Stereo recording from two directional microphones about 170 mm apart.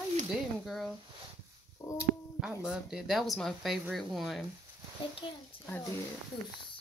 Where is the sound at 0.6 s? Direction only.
Centre (ahead or behind).